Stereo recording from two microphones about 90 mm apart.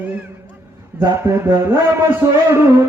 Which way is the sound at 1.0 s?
30° right (ahead or behind).